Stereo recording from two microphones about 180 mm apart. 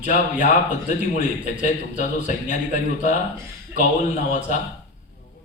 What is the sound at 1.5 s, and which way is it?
A man's voice, 40° left (ahead or behind).